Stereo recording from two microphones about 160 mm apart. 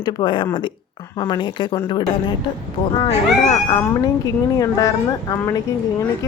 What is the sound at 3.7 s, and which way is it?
A woman's voice, 25° left (ahead or behind).